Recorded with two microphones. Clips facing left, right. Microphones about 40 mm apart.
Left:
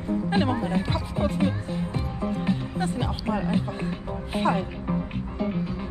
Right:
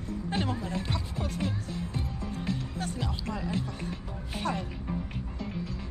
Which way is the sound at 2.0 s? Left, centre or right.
Left.